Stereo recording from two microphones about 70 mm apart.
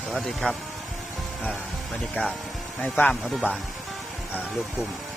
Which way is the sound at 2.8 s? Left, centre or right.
Centre.